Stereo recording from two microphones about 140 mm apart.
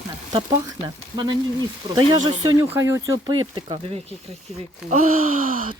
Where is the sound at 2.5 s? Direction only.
20° right (ahead or behind).